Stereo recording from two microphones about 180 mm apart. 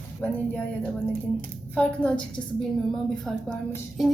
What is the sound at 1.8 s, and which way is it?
A woman's voice, 5° left (ahead or behind).